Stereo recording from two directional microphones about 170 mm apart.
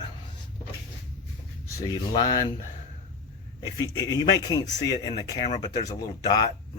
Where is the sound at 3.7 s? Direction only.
20° left (ahead or behind).